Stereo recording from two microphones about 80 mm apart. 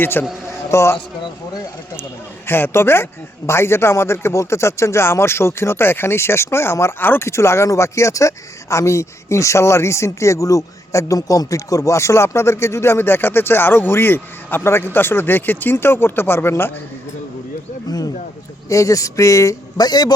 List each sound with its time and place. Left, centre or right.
0.0 s a man's voice: left
0.4 s a sound: left
2.5 s speech: left
17.8 s speech: left